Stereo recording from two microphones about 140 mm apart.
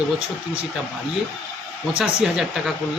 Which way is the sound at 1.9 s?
5° right (ahead or behind).